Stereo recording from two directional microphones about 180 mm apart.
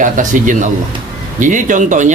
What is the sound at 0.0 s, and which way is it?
Speech, 45° right (ahead or behind).